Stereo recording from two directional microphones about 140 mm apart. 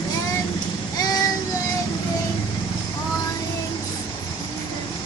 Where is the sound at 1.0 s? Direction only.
25° left (ahead or behind).